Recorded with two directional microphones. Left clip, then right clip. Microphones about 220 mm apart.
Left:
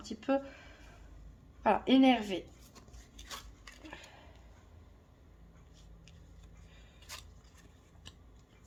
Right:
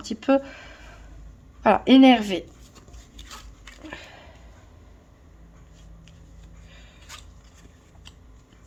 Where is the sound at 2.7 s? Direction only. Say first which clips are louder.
Right 7 dB; 20° right (ahead or behind).